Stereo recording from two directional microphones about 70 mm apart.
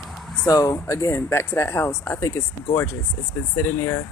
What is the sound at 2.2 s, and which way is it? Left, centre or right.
Speech, left.